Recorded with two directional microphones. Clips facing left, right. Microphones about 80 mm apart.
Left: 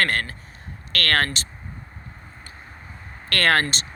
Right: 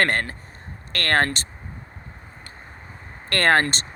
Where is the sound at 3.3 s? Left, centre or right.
Right.